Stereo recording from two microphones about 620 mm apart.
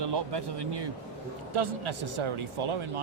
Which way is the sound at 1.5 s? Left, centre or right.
Right.